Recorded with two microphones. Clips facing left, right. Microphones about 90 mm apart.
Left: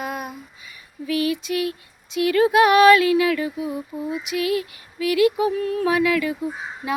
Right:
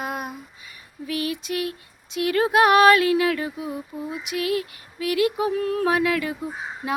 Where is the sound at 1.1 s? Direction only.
40° right (ahead or behind).